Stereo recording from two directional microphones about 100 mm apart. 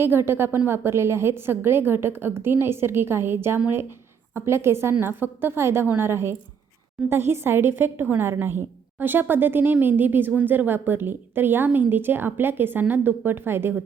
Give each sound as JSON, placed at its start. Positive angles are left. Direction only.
{"t": 0.0, "sound": "a woman's voice", "side_deg": -25}